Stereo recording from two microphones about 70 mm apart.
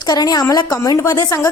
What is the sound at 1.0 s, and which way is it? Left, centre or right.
Speech, left.